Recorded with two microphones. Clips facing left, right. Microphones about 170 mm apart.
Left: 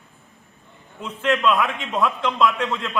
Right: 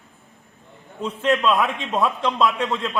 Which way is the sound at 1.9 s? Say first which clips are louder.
Even; 20° right (ahead or behind).